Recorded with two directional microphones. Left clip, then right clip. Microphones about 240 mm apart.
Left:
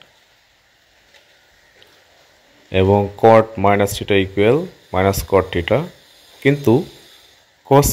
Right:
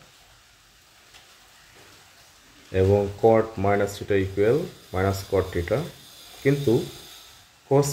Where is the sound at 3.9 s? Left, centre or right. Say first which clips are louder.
Left 7 dB; left.